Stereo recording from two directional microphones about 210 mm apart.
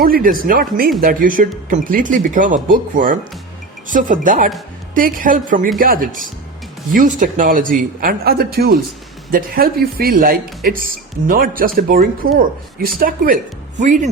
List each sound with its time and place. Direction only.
0.0 s speech: 45° right (ahead or behind)